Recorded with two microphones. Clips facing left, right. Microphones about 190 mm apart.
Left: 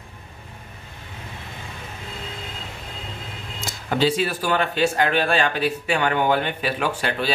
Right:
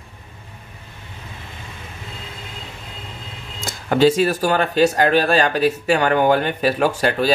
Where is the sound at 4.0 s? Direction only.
45° right (ahead or behind).